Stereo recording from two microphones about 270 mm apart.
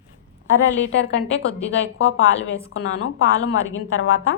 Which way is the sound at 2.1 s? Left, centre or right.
Left.